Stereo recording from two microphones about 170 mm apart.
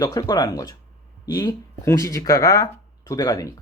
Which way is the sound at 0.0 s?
20° left (ahead or behind).